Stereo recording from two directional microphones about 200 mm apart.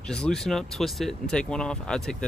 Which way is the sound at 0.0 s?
5° left (ahead or behind).